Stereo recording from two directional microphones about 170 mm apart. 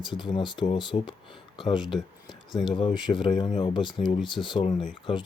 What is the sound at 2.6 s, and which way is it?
Speech, 25° left (ahead or behind).